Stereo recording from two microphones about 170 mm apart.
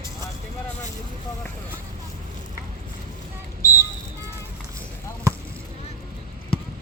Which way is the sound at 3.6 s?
20° left (ahead or behind).